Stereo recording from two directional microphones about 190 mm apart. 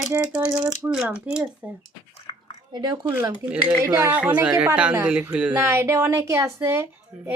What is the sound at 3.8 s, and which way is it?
A woman's voice, 10° right (ahead or behind).